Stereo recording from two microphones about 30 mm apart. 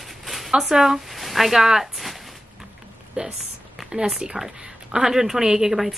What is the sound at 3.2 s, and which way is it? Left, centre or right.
Speech, right.